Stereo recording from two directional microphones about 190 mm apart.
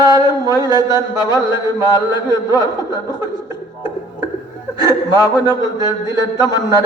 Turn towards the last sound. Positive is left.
turn(degrees=20)  # may be behind; listen again after turning